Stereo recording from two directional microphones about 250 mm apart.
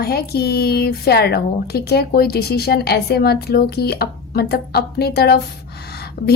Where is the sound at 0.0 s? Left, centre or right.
Left.